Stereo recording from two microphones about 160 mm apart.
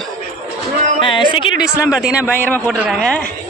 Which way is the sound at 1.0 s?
30° left (ahead or behind).